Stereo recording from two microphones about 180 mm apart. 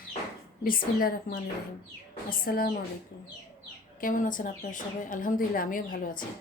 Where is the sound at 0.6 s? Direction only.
55° left (ahead or behind).